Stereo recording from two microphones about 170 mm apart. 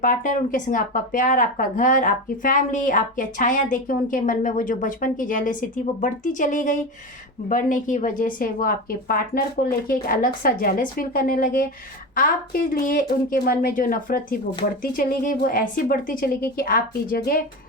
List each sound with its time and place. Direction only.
0.0 s a woman's voice: 50° left (ahead or behind)